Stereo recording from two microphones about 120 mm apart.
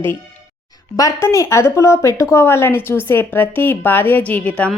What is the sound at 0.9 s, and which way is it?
A woman's voice, 25° left (ahead or behind).